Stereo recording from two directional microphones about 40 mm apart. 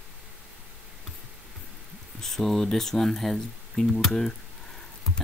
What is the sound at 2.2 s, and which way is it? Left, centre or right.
Speech, centre.